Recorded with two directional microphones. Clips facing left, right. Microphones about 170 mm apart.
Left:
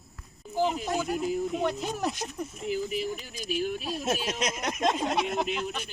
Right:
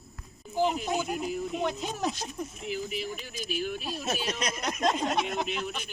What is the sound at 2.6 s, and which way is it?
Speech, 40° left (ahead or behind).